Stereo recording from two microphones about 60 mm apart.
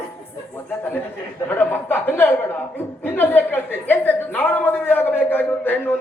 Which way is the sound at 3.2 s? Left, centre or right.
Left.